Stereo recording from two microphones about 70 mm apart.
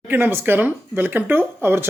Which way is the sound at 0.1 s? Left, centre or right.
Right.